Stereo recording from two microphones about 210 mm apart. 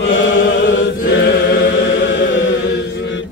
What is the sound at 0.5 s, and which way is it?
Chant, 60° left (ahead or behind).